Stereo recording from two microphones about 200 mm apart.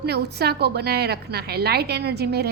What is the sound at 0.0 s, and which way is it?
A woman's voice, 55° right (ahead or behind).